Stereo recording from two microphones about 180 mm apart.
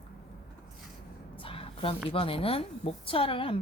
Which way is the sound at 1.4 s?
30° left (ahead or behind).